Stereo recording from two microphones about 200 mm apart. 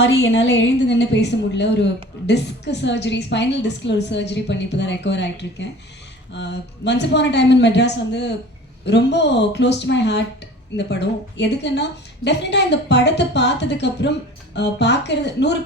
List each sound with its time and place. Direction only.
0.0 s a woman's voice: 65° left (ahead or behind)